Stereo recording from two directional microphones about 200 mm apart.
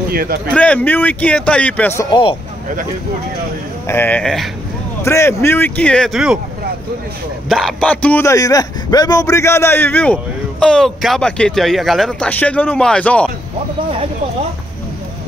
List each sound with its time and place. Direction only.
0.1 s speech: 50° right (ahead or behind)
0.5 s a man's voice: 5° left (ahead or behind)
2.0 s speech: 25° left (ahead or behind)
3.8 s a man's voice: 10° left (ahead or behind)
5.0 s a man's voice: 15° left (ahead or behind); by 6.4 s centre (ahead or behind)
7.4 s a man's voice: centre (ahead or behind)